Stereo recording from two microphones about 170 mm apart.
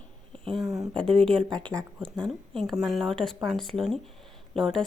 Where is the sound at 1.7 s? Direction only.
20° right (ahead or behind).